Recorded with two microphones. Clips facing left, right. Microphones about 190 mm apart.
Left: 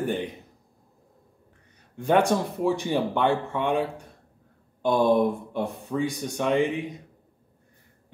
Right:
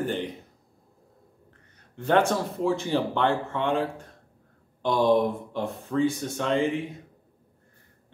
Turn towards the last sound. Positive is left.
turn(degrees=15)  # may be behind; listen again after turning